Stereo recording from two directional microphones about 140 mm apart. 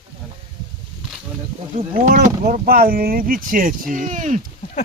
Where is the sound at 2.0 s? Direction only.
65° right (ahead or behind).